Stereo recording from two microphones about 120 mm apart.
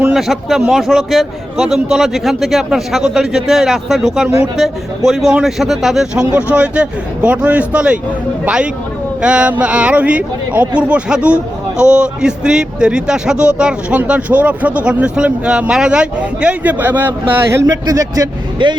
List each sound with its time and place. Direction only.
0.1 s a man's voice: centre (ahead or behind); by 17.7 s 20° right (ahead or behind)
17.8 s speech: 30° right (ahead or behind)